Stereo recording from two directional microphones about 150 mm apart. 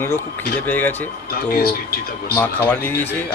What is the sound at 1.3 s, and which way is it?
Speech, 90° left.